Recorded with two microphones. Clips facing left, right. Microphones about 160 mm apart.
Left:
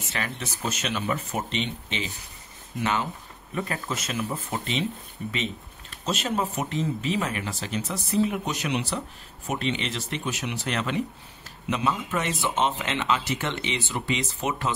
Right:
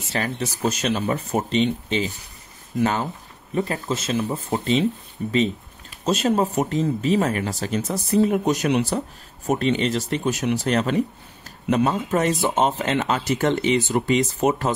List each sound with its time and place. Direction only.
0.1 s speech: 35° right (ahead or behind)
3.5 s speech: 30° right (ahead or behind)